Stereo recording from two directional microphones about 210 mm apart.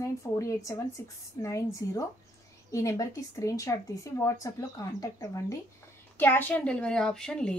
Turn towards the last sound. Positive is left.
turn(degrees=5)  # may be behind; listen again after turning